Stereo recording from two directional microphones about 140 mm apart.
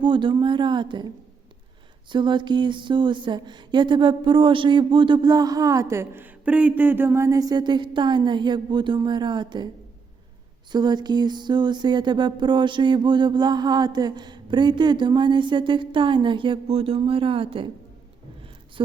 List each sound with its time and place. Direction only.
0.0 s music: 35° right (ahead or behind)
2.1 s music: 35° right (ahead or behind)
10.7 s music: 30° right (ahead or behind)